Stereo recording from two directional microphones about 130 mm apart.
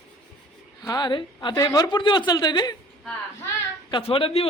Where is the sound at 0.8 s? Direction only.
30° left (ahead or behind).